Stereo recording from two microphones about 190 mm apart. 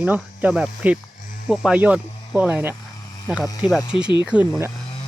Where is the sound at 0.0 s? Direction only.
5° right (ahead or behind).